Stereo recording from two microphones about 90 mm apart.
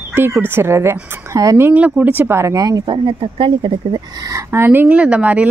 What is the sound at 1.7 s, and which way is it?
Speech, 15° right (ahead or behind).